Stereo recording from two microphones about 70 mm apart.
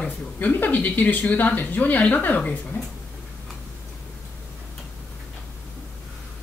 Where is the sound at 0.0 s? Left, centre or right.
Left.